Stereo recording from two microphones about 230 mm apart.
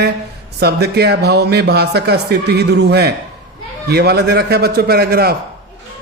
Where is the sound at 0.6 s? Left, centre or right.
Right.